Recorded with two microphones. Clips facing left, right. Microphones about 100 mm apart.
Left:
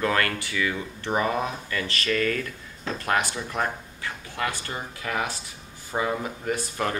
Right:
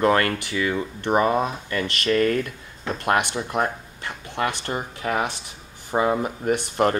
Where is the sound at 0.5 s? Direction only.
30° right (ahead or behind).